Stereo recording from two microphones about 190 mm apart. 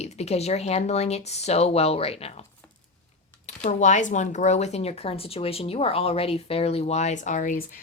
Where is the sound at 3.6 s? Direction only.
40° left (ahead or behind).